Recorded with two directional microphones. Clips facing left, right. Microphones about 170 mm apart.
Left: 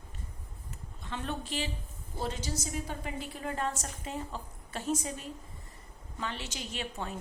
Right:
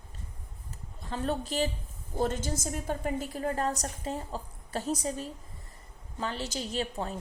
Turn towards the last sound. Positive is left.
turn(degrees=-35)  # may be behind; listen again after turning